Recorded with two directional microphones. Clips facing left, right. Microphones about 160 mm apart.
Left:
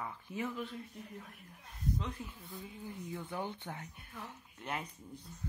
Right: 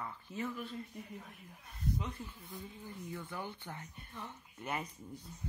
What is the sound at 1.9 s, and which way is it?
Speech, 5° right (ahead or behind).